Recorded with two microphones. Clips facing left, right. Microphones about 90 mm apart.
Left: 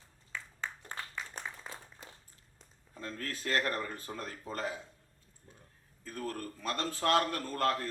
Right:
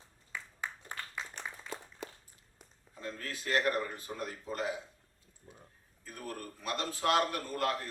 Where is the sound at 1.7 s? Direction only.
70° right (ahead or behind).